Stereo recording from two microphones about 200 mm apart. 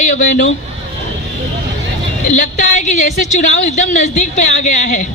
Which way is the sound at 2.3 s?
35° left (ahead or behind).